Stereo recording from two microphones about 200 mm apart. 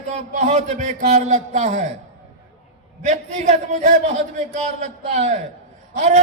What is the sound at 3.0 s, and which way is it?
A man's voice, 35° right (ahead or behind).